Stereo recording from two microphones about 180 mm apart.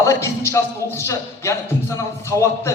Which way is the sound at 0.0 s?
15° left (ahead or behind).